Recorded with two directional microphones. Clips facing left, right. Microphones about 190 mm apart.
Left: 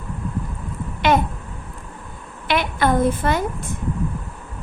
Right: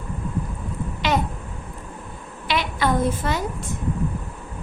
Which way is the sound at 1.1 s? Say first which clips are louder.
Left 5 dB; 55° left (ahead or behind).